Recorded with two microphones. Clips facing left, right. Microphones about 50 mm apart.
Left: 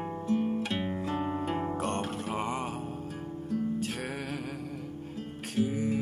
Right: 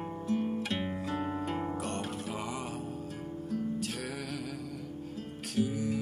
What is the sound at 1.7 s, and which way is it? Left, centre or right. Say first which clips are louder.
Music: left 4 dB; left.